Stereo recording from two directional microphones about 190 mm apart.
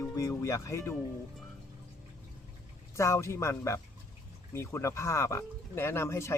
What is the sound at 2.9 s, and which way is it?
Speech, 15° left (ahead or behind).